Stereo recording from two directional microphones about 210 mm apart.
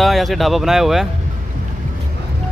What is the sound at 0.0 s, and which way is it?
Speech, centre (ahead or behind).